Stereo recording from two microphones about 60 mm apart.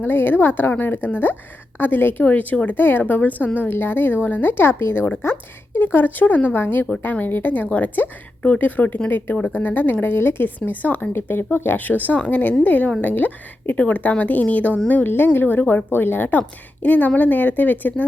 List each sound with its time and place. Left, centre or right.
0.0 s a woman's voice: left